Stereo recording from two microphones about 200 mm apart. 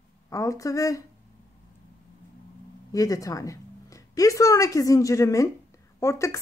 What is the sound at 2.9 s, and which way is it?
A woman's voice, 15° left (ahead or behind).